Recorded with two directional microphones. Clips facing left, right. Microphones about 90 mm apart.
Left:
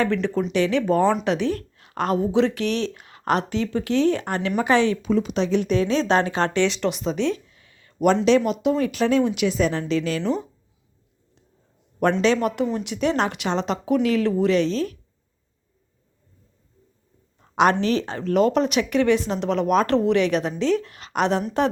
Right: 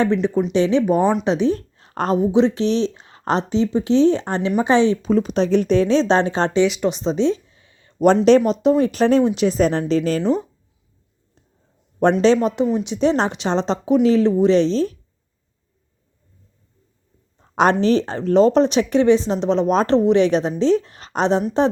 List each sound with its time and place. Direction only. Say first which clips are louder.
0.0 s speech: right 4 dB; 20° right (ahead or behind); by 2.1 s 35° right (ahead or behind)
2.1 s speech: right 5 dB; 20° right (ahead or behind)
5.0 s speech: right 4 dB; 40° right (ahead or behind)
6.6 s speech: right 5 dB; 10° right (ahead or behind)
6.9 s speech: right 5 dB; 25° right (ahead or behind)
12.2 s speech: right 5 dB; 25° right (ahead or behind)
17.6 s speech: right 3 dB; 35° right (ahead or behind)